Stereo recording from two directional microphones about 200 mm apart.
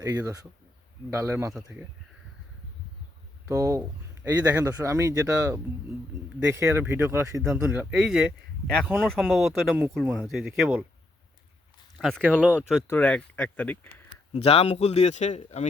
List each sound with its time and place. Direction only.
0.0 s speech: 15° right (ahead or behind)
1.5 s speech: centre (ahead or behind)
3.5 s speech: 15° right (ahead or behind); by 10.7 s centre (ahead or behind)
11.9 s speech: centre (ahead or behind)
12.9 s speech: 10° left (ahead or behind)
14.3 s speech: 30° left (ahead or behind)